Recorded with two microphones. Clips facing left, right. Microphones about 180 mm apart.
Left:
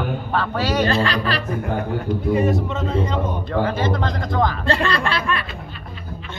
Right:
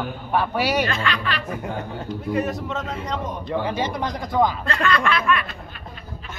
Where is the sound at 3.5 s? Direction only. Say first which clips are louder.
Left 3 dB; 15° right (ahead or behind).